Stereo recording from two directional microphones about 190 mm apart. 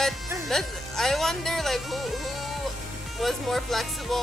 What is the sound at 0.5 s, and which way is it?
Speech, centre (ahead or behind).